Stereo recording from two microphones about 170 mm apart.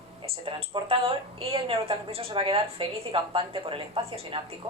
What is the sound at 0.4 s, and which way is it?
A woman's voice, 30° right (ahead or behind).